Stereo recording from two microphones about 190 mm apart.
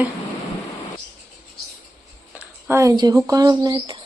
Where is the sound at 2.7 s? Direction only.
15° right (ahead or behind).